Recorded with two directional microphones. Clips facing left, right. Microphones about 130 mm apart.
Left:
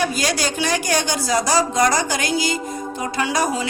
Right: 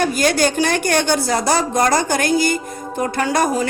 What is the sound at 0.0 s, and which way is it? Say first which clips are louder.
A woman's voice: right 5 dB; 50° right (ahead or behind).